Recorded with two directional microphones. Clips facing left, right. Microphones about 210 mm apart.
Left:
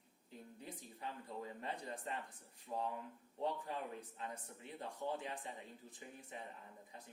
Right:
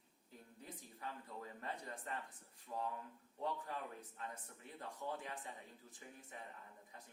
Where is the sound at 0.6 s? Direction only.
25° left (ahead or behind).